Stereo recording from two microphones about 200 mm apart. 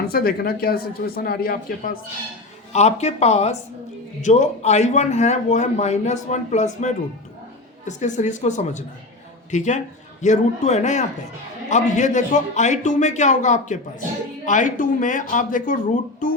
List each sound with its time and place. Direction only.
0.0 s speech: 50° left (ahead or behind)
2.7 s a man's voice: 35° left (ahead or behind)